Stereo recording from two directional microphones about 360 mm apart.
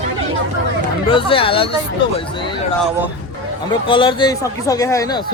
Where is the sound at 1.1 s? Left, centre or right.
Centre.